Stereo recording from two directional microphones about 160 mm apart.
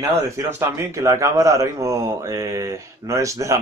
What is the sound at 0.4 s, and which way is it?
A man's voice, 15° right (ahead or behind).